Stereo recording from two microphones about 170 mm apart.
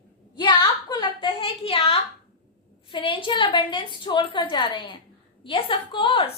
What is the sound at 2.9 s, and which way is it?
A woman's voice, 30° left (ahead or behind).